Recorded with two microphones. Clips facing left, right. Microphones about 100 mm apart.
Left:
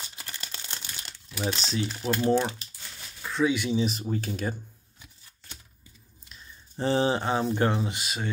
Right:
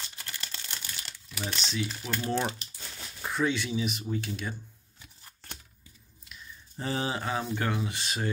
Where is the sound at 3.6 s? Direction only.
25° left (ahead or behind).